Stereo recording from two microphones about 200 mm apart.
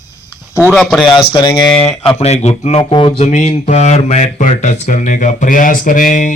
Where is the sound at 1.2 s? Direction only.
20° left (ahead or behind).